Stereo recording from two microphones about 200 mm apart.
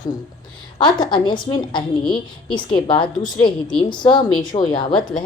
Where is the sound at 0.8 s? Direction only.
20° left (ahead or behind).